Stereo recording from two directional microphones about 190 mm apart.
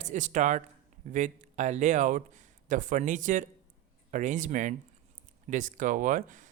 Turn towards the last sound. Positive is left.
turn(degrees=-40)  # may be behind; listen again after turning